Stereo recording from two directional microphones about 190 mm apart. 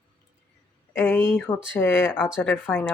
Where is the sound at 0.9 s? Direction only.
10° left (ahead or behind).